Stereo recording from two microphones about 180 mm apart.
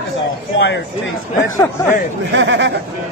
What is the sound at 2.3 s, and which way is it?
Speech, 85° right.